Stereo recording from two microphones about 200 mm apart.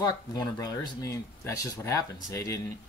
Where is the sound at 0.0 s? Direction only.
20° left (ahead or behind).